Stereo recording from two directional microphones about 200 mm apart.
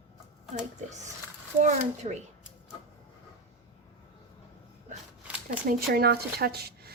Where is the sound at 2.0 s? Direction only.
35° right (ahead or behind).